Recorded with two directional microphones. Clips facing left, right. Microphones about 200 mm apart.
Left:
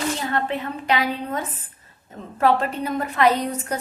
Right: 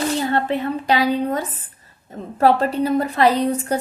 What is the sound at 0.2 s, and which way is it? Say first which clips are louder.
A woman's voice: right 5 dB; 30° right (ahead or behind).